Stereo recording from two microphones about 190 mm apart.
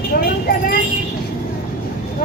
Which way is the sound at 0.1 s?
50° left (ahead or behind).